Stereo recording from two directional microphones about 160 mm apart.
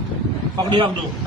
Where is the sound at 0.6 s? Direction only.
30° right (ahead or behind).